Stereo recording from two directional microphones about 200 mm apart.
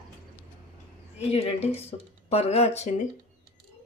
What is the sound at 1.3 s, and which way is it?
A woman's voice, 30° left (ahead or behind).